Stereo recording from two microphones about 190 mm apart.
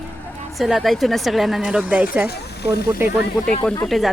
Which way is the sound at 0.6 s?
Centre (ahead or behind).